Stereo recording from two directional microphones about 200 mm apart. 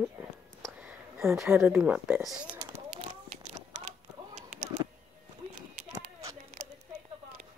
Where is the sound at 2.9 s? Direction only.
35° right (ahead or behind).